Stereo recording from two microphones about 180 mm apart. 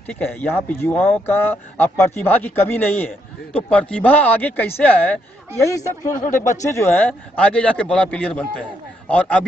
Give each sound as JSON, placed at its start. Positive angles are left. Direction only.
{"t": 0.1, "sound": "speech", "side_deg": 10}
{"t": 6.2, "sound": "speech", "side_deg": 45}
{"t": 6.6, "sound": "speech", "side_deg": 15}